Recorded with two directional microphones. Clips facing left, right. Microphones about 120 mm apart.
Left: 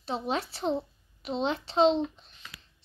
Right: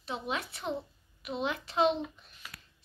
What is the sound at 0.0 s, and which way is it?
A woman's voice, 35° left (ahead or behind).